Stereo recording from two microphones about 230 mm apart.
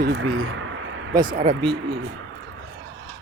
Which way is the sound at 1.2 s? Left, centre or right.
Right.